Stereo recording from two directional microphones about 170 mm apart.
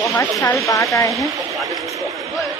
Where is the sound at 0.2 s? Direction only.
15° left (ahead or behind).